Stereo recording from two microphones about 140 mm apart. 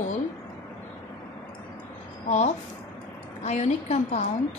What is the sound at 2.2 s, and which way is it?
A woman's voice, 55° left (ahead or behind).